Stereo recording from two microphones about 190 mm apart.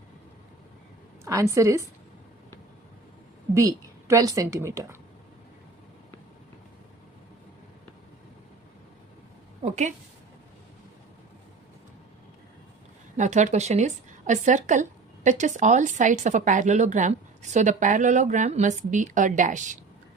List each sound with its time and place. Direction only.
1.2 s a woman's voice: 15° right (ahead or behind)
3.5 s a woman's voice: 15° right (ahead or behind)
9.6 s a woman's voice: 40° right (ahead or behind)
13.1 s a woman's voice: 40° right (ahead or behind)